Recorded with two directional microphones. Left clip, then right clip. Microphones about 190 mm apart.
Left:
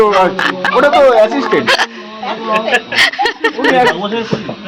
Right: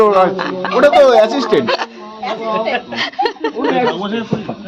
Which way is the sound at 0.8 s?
40° right (ahead or behind).